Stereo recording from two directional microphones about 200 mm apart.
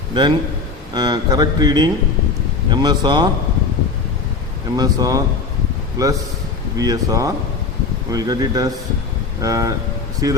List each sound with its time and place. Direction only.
0.1 s a man's voice: 20° right (ahead or behind)
4.8 s speech: 20° right (ahead or behind)